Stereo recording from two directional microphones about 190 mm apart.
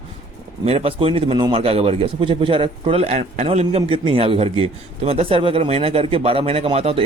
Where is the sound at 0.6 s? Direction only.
30° right (ahead or behind).